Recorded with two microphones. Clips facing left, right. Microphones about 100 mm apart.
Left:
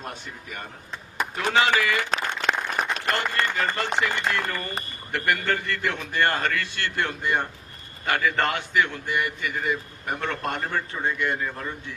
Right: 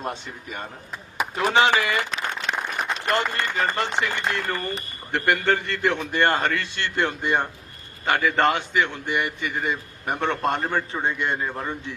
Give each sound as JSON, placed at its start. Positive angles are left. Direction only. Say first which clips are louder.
{"t": 0.0, "sound": "a man's voice", "louder": "right 5 dB", "side_deg": -25}
{"t": 2.0, "sound": "applause", "louder": "left 2 dB", "side_deg": 55}
{"t": 3.1, "sound": "a man's voice", "louder": "right 4 dB", "side_deg": -25}